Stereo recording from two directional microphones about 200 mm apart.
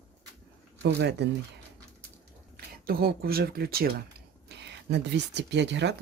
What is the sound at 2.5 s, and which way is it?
Speech, 50° right (ahead or behind).